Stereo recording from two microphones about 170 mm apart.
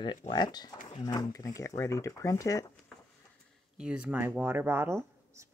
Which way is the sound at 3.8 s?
5° right (ahead or behind).